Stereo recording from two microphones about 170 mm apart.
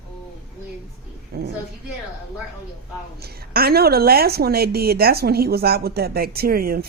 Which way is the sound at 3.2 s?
65° right (ahead or behind).